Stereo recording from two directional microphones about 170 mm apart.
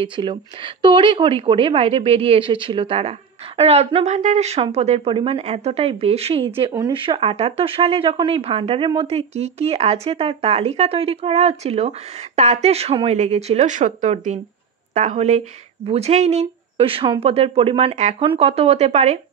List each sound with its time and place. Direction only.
0.0 s a woman's voice: 30° right (ahead or behind)